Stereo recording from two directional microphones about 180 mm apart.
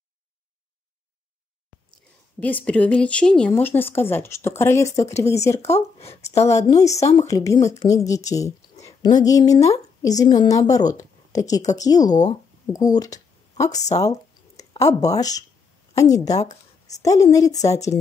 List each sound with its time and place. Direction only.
2.4 s a woman's voice: 10° left (ahead or behind)
5.6 s speech: 35° left (ahead or behind)
6.5 s a woman's voice: 15° left (ahead or behind)
12.1 s speech: 40° left (ahead or behind)
12.7 s speech: 20° left (ahead or behind)
13.7 s speech: 40° left (ahead or behind)
14.6 s a woman's voice: 20° left (ahead or behind)